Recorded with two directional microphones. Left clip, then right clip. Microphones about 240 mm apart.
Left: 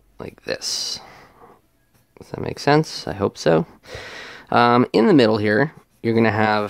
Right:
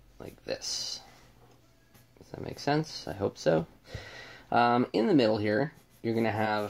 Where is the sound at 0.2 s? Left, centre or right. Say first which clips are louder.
Left 9 dB; left.